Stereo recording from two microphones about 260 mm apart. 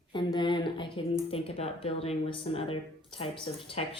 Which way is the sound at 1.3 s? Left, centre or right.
Left.